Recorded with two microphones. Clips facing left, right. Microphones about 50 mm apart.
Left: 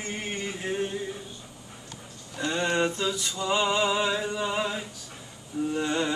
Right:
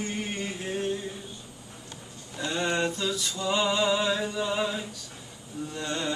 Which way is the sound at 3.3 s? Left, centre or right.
Centre.